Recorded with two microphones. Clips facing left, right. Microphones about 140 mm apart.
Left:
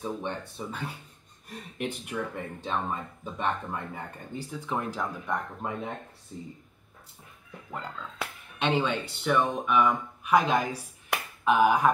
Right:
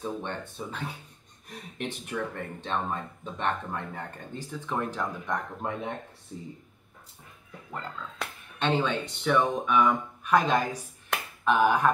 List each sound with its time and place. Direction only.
0.0 s speech: 10° left (ahead or behind)
7.7 s speech: 10° left (ahead or behind)